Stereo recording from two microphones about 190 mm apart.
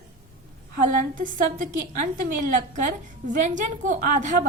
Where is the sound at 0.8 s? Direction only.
45° right (ahead or behind).